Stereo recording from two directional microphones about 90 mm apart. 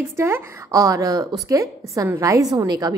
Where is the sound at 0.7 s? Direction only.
40° right (ahead or behind).